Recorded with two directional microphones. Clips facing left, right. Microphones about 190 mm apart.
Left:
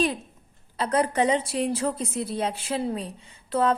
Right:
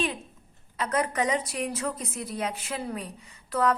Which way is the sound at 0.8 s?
30° left (ahead or behind).